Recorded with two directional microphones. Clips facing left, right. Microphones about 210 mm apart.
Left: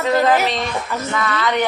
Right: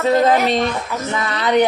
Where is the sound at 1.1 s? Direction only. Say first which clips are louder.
Right 4 dB; 25° right (ahead or behind).